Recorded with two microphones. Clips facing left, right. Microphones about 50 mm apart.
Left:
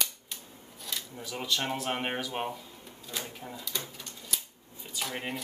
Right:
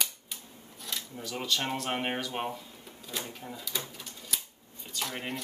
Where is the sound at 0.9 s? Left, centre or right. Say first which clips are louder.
Right 1 dB; centre.